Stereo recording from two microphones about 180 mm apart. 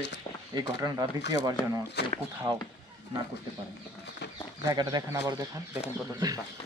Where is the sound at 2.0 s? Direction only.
70° left (ahead or behind).